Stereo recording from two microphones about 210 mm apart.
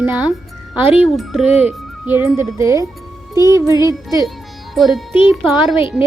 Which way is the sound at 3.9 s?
15° right (ahead or behind).